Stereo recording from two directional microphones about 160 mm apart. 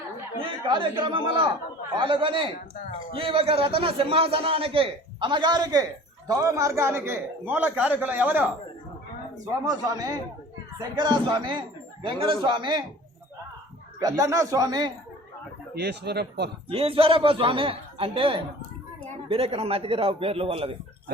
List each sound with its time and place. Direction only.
0.7 s a man's voice: 30° right (ahead or behind); by 8.4 s 10° right (ahead or behind)
9.6 s a man's voice: 20° right (ahead or behind)
14.0 s speech: 20° right (ahead or behind)
15.7 s speech: 90° right
16.6 s a man's voice: 35° right (ahead or behind)